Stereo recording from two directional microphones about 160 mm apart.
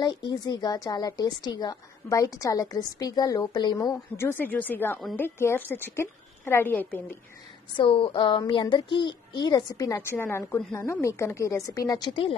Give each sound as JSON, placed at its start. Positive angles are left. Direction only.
{"t": 0.0, "sound": "a woman's voice", "side_deg": 25}
{"t": 7.7, "sound": "a woman's voice", "side_deg": 35}
{"t": 12.1, "sound": "speech", "side_deg": 30}